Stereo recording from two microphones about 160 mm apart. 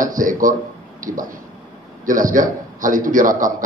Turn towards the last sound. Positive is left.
turn(degrees=-55)  # may be behind; listen again after turning